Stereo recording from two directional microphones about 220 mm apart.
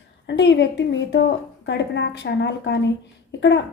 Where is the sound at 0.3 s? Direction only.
55° left (ahead or behind).